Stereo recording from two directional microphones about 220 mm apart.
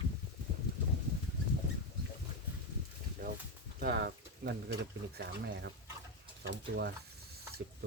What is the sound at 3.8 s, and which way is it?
Speech, 45° right (ahead or behind).